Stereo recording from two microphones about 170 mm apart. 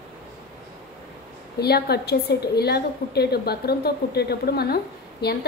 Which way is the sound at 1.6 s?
70° left (ahead or behind).